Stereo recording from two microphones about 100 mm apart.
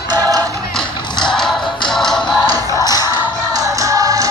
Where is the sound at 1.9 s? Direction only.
5° left (ahead or behind).